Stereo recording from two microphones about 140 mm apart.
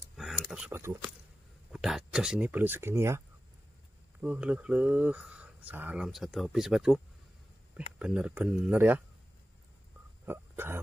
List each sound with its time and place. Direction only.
0.2 s a sound: centre (ahead or behind)
0.7 s speech: 15° right (ahead or behind)
1.7 s speech: 5° right (ahead or behind); by 3.2 s 20° right (ahead or behind)
4.2 s speech: 5° right (ahead or behind)
6.0 s speech: centre (ahead or behind)
10.2 s speech: 15° right (ahead or behind)